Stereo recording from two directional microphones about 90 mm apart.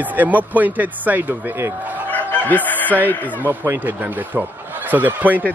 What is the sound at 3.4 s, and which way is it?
Speech, 25° right (ahead or behind).